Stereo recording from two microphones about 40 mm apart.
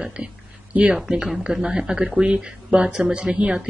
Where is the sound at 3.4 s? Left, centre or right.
Right.